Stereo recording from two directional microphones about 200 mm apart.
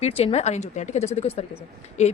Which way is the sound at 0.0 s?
30° left (ahead or behind).